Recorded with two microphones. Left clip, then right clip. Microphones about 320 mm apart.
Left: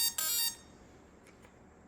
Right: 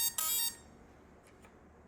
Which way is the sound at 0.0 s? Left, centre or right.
Centre.